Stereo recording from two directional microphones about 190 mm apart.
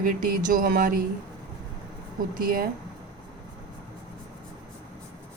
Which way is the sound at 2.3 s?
50° right (ahead or behind).